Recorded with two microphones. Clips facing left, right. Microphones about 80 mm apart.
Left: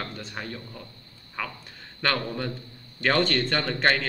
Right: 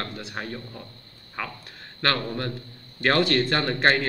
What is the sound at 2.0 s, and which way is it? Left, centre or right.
A man's voice, centre.